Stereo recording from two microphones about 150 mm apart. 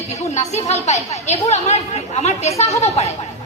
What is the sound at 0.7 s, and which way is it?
A woman's voice, 50° left (ahead or behind).